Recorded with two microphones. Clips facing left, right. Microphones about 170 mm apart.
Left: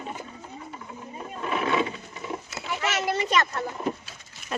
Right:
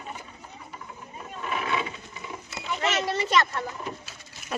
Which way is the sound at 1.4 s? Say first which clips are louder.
Left 4 dB; 40° left (ahead or behind).